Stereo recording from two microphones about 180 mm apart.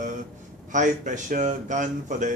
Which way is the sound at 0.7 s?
45° right (ahead or behind).